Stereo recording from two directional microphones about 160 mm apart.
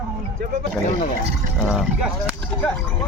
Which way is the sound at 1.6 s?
5° right (ahead or behind).